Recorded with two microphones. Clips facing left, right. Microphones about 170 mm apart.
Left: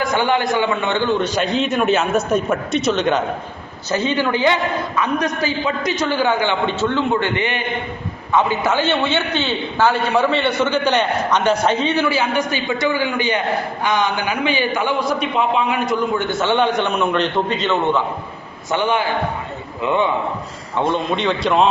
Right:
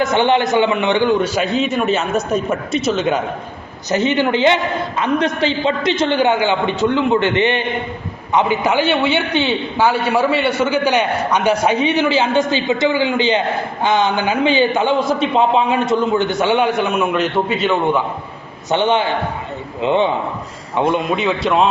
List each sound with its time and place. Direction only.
0.0 s a man's voice: 20° right (ahead or behind); by 3.2 s 5° right (ahead or behind)
3.8 s a man's voice: 20° right (ahead or behind)
18.7 s a man's voice: 25° right (ahead or behind)
20.7 s a man's voice: 10° right (ahead or behind)